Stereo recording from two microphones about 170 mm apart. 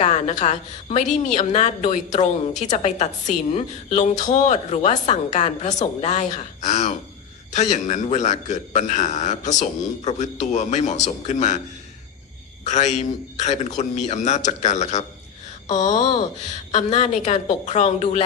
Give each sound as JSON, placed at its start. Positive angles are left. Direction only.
{"t": 0.0, "sound": "a woman's voice", "side_deg": 40}
{"t": 12.6, "sound": "a man's voice", "side_deg": 45}